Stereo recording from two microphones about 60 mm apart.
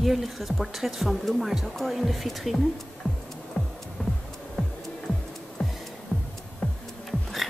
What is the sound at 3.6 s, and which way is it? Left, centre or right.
Music, centre.